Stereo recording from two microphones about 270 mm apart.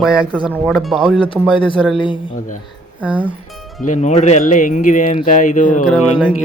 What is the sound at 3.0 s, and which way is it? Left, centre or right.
Speech, centre.